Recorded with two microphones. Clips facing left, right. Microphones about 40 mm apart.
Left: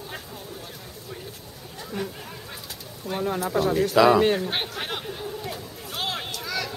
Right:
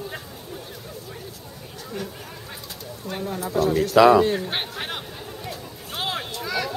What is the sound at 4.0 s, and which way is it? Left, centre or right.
Speech, centre.